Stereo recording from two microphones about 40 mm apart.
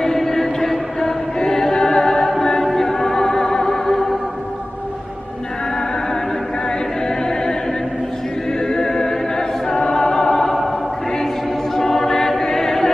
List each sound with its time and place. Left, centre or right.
0.0 s choir: centre
2.3 s music: centre
7.1 s a capella: centre
8.5 s a capella: centre
11.7 s choir: centre